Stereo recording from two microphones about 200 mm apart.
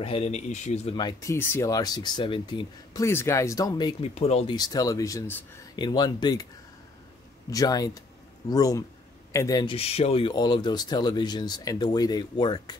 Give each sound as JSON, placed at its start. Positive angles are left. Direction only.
{"t": 0.0, "sound": "speech", "side_deg": 30}
{"t": 4.6, "sound": "speech", "side_deg": 20}
{"t": 7.4, "sound": "speech", "side_deg": 20}